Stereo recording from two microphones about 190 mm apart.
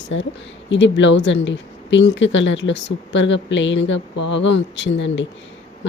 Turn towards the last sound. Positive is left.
turn(degrees=70)  # may be behind; listen again after turning